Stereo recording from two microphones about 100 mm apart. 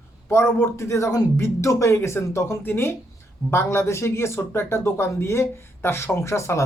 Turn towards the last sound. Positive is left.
turn(degrees=30)  # may be behind; listen again after turning